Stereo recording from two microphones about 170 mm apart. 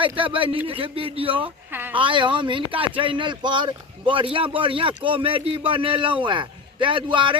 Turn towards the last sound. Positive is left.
turn(degrees=-30)  # may be behind; listen again after turning